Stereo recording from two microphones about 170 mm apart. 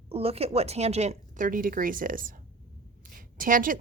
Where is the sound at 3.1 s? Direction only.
55° right (ahead or behind).